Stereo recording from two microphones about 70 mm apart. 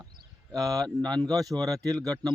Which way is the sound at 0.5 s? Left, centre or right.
Centre.